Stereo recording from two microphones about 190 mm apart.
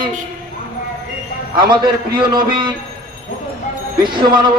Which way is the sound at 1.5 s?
25° right (ahead or behind).